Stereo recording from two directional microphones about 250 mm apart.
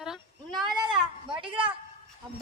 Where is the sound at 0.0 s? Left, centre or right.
Centre.